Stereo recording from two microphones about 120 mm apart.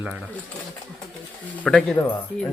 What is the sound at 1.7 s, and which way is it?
Speech, 10° left (ahead or behind).